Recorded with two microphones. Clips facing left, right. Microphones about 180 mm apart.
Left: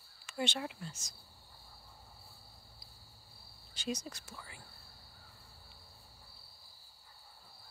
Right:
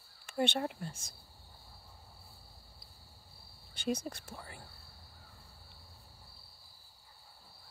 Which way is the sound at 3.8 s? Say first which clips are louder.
Right 4 dB; 55° right (ahead or behind).